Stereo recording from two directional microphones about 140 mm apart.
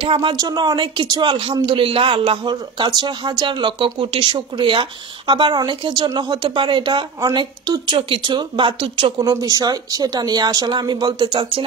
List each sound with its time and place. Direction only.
0.0 s speech: 35° right (ahead or behind)
9.3 s speech: 25° right (ahead or behind)